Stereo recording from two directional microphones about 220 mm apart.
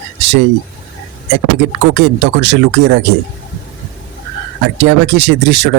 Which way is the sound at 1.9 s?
55° right (ahead or behind).